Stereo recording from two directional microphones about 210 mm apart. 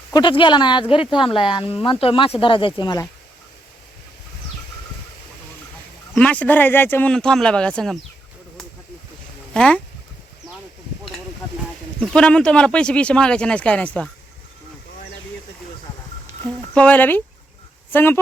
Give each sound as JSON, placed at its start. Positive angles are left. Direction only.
{"t": 0.1, "sound": "speech", "side_deg": 20}
{"t": 6.1, "sound": "speech", "side_deg": 5}
{"t": 9.5, "sound": "speech", "side_deg": 5}
{"t": 11.9, "sound": "speech", "side_deg": 5}
{"t": 16.6, "sound": "speech", "side_deg": 5}